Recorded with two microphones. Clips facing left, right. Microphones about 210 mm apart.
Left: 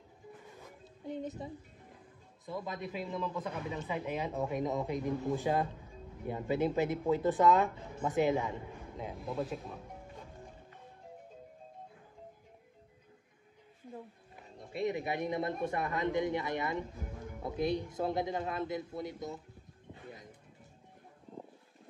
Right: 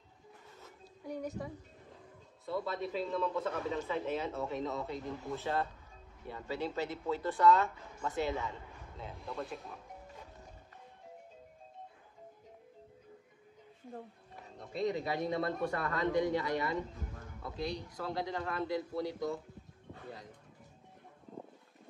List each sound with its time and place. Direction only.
0.6 s a sound: 20° left (ahead or behind)
2.4 s speech: 15° left (ahead or behind)
9.1 s speech: centre (ahead or behind)
14.9 s a man's voice: 20° left (ahead or behind)